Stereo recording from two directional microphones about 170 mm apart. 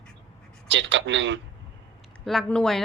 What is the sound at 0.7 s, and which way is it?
Speech, 90° right.